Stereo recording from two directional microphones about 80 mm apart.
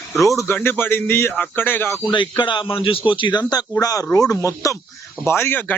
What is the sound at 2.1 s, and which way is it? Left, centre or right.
A man's voice, left.